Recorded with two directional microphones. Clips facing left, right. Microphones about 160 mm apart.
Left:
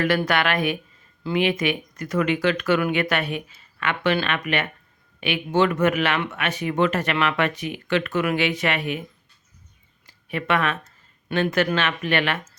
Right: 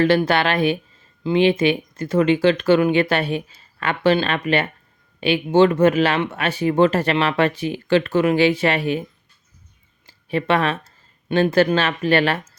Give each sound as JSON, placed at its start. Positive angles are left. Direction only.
{"t": 0.0, "sound": "speech", "side_deg": -30}
{"t": 10.1, "sound": "speech", "side_deg": -30}